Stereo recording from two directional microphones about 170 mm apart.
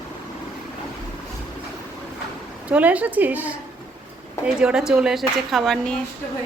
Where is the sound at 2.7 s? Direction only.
10° right (ahead or behind).